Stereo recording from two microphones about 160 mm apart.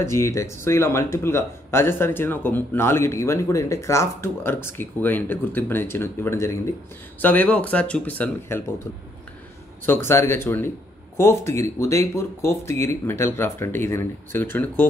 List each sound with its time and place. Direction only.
0.0 s speech: 20° left (ahead or behind)
9.8 s speech: 15° left (ahead or behind)